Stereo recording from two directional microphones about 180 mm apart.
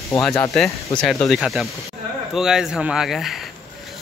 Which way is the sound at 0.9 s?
5° left (ahead or behind).